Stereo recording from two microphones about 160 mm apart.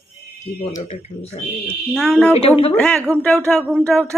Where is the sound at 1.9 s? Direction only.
5° left (ahead or behind).